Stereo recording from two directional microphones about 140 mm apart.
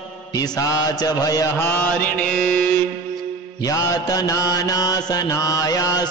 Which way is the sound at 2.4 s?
10° left (ahead or behind).